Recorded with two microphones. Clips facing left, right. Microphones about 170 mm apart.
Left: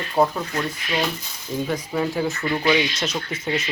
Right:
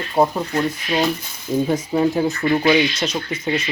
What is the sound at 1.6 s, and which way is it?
Speech, 25° right (ahead or behind).